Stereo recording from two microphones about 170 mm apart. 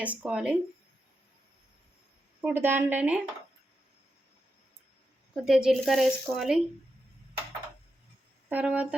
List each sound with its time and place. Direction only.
0.0 s speech: 10° right (ahead or behind)
2.4 s speech: 15° right (ahead or behind)
5.5 s speech: 5° right (ahead or behind)
8.4 s speech: 10° right (ahead or behind)